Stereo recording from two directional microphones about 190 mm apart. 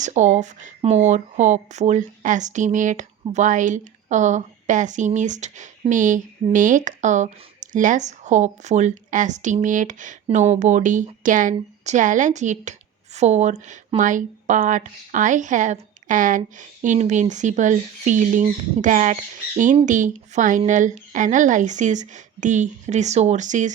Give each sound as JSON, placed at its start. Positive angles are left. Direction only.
{"t": 0.0, "sound": "speech", "side_deg": -40}